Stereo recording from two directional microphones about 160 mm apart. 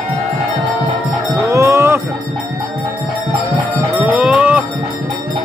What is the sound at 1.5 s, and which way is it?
Livestock, 20° right (ahead or behind).